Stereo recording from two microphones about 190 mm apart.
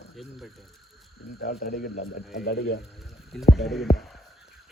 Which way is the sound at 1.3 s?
50° left (ahead or behind).